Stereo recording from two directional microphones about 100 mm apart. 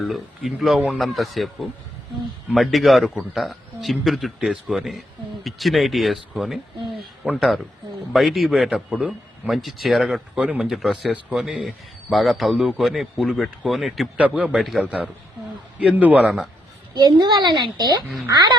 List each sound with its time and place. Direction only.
0.0 s a man's voice: centre (ahead or behind)
2.5 s a man's voice: centre (ahead or behind)
10.3 s a man's voice: 15° right (ahead or behind)
14.2 s a man's voice: 15° right (ahead or behind)
14.6 s a man's voice: centre (ahead or behind)
15.8 s a man's voice: 15° right (ahead or behind)
16.9 s a child's voice: 45° right (ahead or behind)